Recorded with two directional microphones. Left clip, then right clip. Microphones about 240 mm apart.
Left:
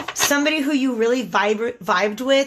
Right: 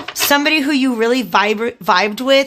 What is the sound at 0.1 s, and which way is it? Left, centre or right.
Speech, right.